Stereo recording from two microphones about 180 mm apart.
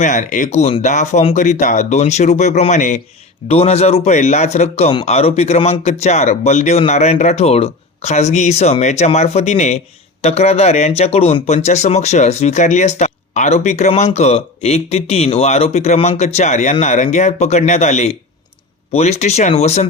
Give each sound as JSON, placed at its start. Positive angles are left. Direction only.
{"t": 0.0, "sound": "a man's voice", "side_deg": 45}